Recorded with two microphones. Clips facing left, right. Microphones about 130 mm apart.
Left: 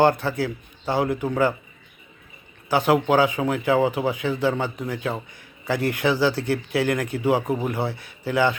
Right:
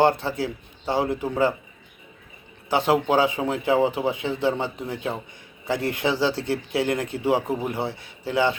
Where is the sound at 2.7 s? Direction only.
25° right (ahead or behind).